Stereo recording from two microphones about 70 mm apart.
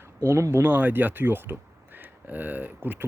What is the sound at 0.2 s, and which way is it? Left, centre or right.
Speech, right.